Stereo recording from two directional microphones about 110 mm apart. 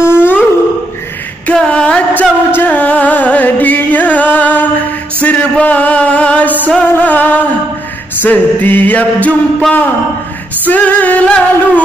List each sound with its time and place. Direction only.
0.0 s whale vocalization: 20° left (ahead or behind)
1.5 s female singing: 10° left (ahead or behind)
2.5 s music: 15° left (ahead or behind)
10.7 s music: 15° left (ahead or behind)